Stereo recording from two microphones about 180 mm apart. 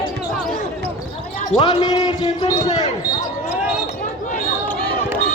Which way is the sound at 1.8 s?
20° left (ahead or behind).